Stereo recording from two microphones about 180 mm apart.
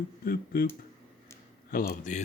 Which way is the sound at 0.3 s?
55° left (ahead or behind).